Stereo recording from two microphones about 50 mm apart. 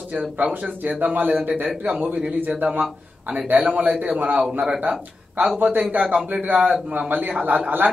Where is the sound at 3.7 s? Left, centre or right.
Right.